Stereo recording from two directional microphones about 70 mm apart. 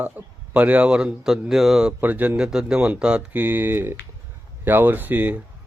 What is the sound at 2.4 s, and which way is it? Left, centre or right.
Speech, centre.